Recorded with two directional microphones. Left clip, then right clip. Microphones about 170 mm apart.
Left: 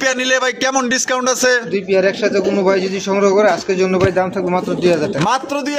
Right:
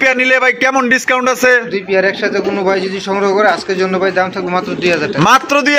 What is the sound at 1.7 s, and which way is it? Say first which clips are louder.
A man's voice: right 2 dB; 55° left (ahead or behind).